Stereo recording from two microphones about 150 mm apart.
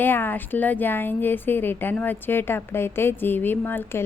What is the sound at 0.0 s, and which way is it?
Speech, 15° left (ahead or behind).